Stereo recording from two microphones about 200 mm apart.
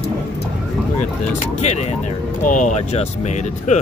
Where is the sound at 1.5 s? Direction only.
35° left (ahead or behind).